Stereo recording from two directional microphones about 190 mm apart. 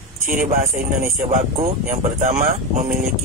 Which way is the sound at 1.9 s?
40° right (ahead or behind).